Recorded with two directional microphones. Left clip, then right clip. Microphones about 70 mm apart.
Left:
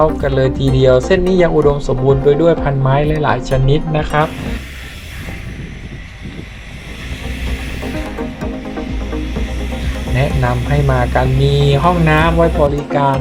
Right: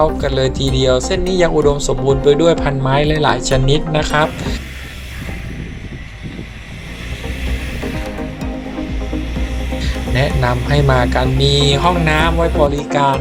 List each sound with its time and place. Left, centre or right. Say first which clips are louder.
0.0 s speech: left 1 dB; right
0.5 s speech: left 3 dB; right
10.2 s speech: right 1 dB; right